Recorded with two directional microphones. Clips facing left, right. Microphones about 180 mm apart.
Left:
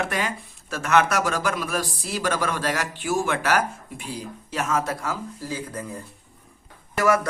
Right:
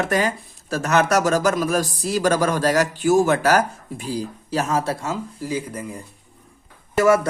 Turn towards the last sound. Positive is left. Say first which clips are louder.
# right 5 dB
turn(degrees=-25)  # may be behind; listen again after turning